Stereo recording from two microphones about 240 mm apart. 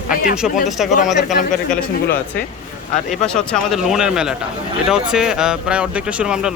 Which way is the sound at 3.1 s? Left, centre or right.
Centre.